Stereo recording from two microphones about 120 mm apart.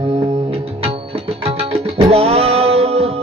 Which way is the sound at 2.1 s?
55° right (ahead or behind).